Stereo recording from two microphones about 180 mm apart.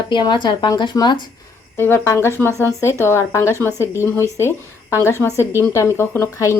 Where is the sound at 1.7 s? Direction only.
10° left (ahead or behind).